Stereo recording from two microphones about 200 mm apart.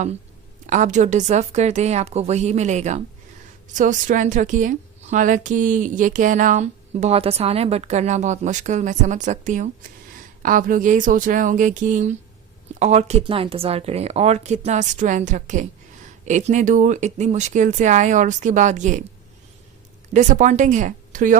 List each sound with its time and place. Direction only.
0.7 s a woman's voice: 40° right (ahead or behind)
20.1 s a woman's voice: 40° right (ahead or behind)